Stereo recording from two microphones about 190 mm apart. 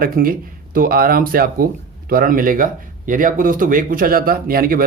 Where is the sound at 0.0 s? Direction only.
50° right (ahead or behind).